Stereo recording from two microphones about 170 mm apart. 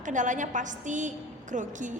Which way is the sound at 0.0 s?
45° right (ahead or behind).